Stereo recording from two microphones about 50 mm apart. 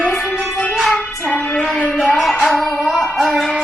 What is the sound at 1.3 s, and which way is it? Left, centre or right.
Music, left.